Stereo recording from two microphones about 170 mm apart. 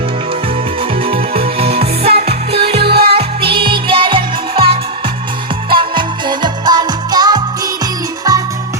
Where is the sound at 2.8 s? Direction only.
70° right (ahead or behind).